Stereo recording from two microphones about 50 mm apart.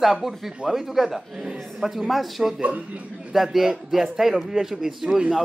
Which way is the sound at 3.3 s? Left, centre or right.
Centre.